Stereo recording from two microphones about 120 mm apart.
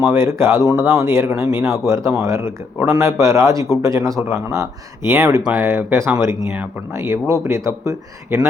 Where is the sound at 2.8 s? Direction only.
25° right (ahead or behind).